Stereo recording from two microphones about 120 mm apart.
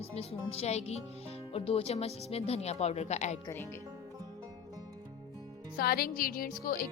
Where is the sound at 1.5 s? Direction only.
55° left (ahead or behind); by 3.3 s 75° left (ahead or behind).